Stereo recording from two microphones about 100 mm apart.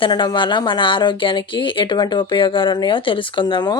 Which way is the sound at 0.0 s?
50° left (ahead or behind).